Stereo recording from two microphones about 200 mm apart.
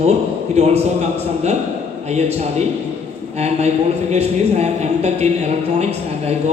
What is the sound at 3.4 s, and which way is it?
Speech, 35° right (ahead or behind).